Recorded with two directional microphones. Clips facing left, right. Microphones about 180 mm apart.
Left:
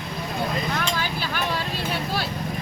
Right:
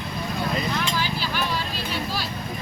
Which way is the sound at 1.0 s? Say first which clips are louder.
Right 1 dB; 55° left (ahead or behind).